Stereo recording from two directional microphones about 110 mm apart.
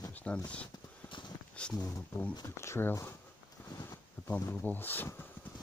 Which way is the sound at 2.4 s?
25° left (ahead or behind).